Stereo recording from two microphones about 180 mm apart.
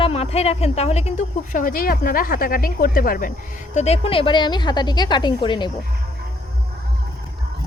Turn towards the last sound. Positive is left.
turn(degrees=25)  # may be behind; listen again after turning